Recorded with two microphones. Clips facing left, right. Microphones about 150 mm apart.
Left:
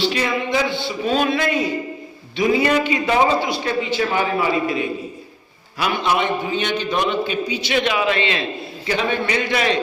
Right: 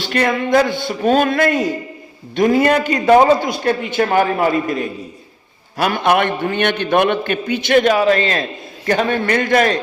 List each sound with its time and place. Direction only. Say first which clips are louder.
0.0 s a man's voice: right 3 dB; 55° right (ahead or behind)